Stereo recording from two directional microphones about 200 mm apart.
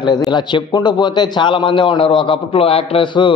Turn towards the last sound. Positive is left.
turn(degrees=25)  # may be behind; listen again after turning